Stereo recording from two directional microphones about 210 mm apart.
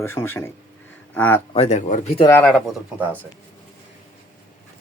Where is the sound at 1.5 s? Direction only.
30° left (ahead or behind).